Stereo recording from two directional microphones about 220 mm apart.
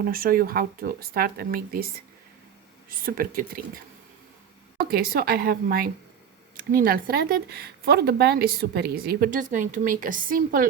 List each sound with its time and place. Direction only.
0.0 s speech: 40° right (ahead or behind)
3.1 s speech: 40° right (ahead or behind)
4.8 s speech: 40° right (ahead or behind)